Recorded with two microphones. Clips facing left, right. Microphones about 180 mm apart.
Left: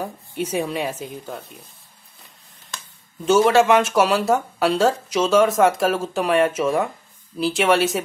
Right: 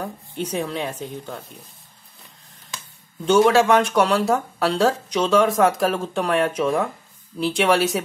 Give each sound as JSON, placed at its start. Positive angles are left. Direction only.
{"t": 0.0, "sound": "speech", "side_deg": 10}
{"t": 3.3, "sound": "speech", "side_deg": 5}